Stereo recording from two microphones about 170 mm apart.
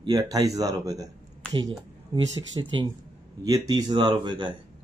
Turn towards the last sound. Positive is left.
turn(degrees=-30)  # may be behind; listen again after turning